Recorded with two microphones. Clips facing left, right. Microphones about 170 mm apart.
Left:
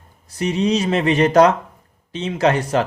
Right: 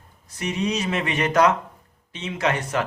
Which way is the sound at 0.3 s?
30° left (ahead or behind).